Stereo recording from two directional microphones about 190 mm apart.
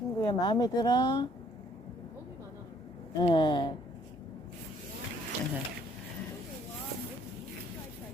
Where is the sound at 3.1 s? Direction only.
25° left (ahead or behind).